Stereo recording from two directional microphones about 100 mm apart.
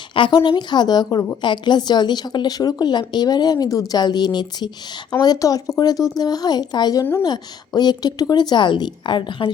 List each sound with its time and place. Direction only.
0.1 s a woman's voice: 55° left (ahead or behind)
0.3 s speech: 45° left (ahead or behind)